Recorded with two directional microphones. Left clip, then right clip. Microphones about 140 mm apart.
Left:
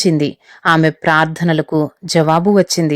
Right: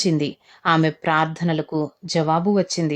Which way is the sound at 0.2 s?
40° left (ahead or behind).